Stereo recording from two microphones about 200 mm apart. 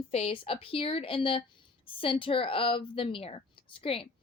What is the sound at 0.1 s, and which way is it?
A woman's voice, 30° left (ahead or behind).